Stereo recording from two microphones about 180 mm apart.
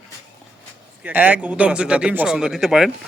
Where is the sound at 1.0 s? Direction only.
10° right (ahead or behind).